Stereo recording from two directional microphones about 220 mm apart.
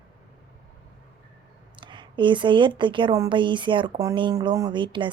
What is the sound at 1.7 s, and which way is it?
A woman's voice, 20° right (ahead or behind).